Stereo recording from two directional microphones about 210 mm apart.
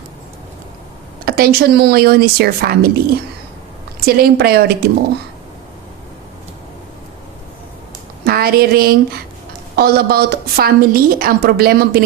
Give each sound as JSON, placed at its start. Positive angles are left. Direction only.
{"t": 1.2, "sound": "a woman's voice", "side_deg": -45}
{"t": 4.0, "sound": "a woman's voice", "side_deg": -45}
{"t": 8.2, "sound": "a woman's voice", "side_deg": -45}